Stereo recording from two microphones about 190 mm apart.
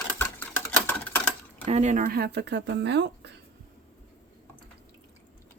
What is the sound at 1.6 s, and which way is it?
Speech, 35° right (ahead or behind).